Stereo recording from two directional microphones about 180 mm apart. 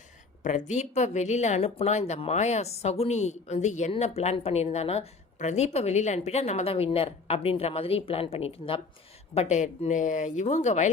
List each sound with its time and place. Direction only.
0.4 s a woman's voice: 40° left (ahead or behind)